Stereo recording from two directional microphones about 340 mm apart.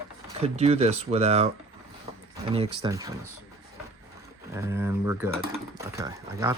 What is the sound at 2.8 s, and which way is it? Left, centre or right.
Speech, centre.